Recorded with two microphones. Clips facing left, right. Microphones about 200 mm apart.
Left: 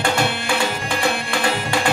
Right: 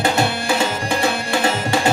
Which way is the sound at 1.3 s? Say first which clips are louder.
Right 3 dB; 40° right (ahead or behind).